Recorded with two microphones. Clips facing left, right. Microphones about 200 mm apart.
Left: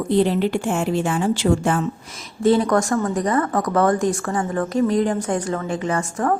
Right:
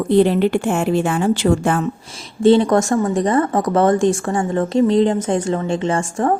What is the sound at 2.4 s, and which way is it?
Speech, 25° right (ahead or behind).